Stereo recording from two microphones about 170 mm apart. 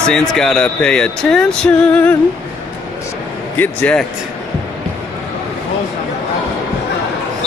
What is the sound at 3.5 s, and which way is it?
Speech, 10° left (ahead or behind).